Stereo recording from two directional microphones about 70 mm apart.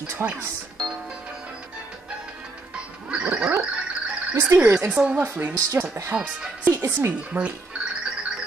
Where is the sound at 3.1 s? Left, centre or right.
Centre.